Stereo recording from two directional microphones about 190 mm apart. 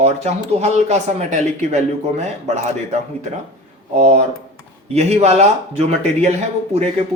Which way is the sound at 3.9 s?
35° right (ahead or behind).